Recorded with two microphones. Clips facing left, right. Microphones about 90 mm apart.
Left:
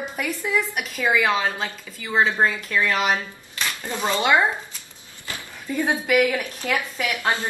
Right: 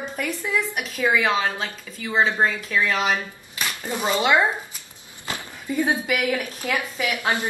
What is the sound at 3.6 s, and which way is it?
Dishes, 10° right (ahead or behind).